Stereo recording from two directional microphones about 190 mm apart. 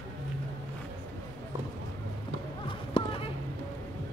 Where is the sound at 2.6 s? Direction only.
30° left (ahead or behind).